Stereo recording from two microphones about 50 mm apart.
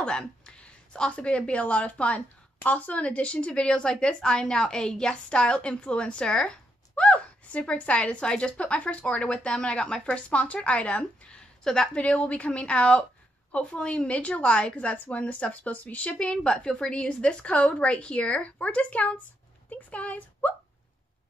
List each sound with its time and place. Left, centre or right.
0.0 s a woman's voice: centre